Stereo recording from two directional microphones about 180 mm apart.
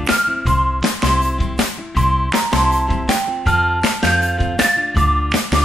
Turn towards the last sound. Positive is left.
turn(degrees=0)  # may be behind; listen again after turning